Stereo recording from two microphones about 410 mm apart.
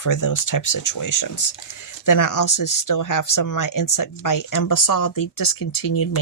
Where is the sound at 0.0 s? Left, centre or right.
Left.